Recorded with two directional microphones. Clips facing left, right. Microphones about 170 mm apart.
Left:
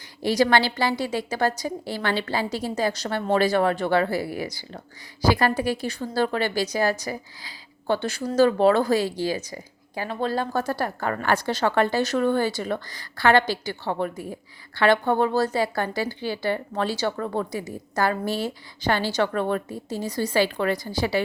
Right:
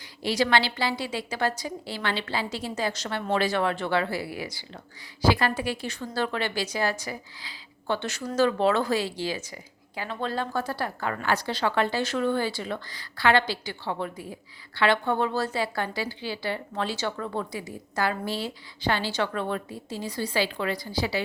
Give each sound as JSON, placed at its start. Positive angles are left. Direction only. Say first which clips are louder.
{"t": 0.2, "sound": "a woman's voice", "louder": "left 4 dB", "side_deg": 45}